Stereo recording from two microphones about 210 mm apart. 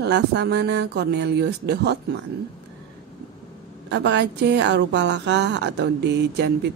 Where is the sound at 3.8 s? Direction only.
55° right (ahead or behind).